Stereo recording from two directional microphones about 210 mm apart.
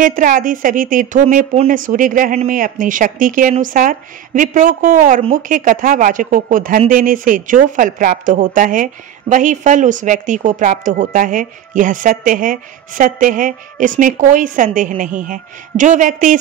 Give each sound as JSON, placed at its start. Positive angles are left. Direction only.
{"t": 0.0, "sound": "a woman's voice", "side_deg": -40}